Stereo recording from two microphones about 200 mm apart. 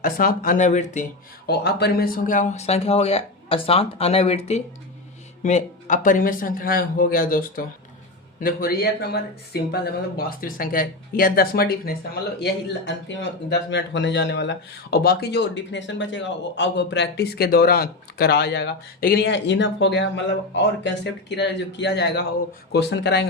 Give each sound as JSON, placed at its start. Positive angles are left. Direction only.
{"t": 0.0, "sound": "speech", "side_deg": 45}
{"t": 1.5, "sound": "speech", "side_deg": 55}